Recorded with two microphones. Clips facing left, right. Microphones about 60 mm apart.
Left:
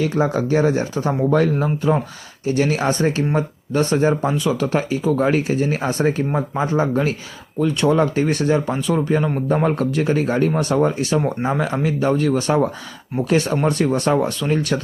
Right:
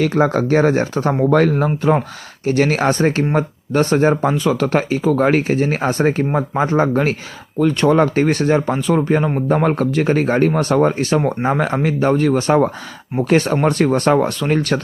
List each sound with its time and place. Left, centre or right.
0.0 s speech: right
3.8 s speech: right
6.3 s speech: right
6.7 s speech: right